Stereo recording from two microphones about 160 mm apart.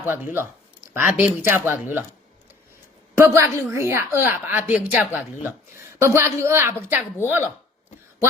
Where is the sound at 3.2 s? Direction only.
15° right (ahead or behind).